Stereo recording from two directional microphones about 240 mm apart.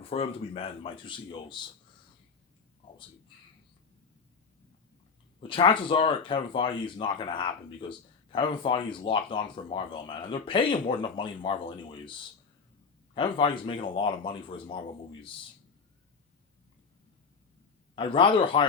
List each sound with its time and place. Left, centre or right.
0.0 s speech: left
5.4 s speech: left
13.1 s speech: left
17.9 s speech: left